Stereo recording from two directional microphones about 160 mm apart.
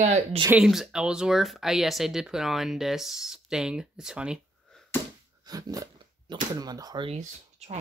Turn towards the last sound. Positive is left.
turn(degrees=-45)  # may be behind; listen again after turning